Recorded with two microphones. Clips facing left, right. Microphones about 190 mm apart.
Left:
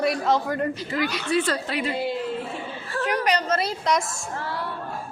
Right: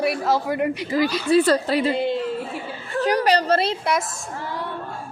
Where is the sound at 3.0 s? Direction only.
35° right (ahead or behind).